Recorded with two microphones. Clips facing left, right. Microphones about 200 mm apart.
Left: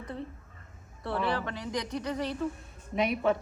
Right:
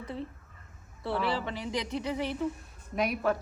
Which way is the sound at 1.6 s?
25° right (ahead or behind).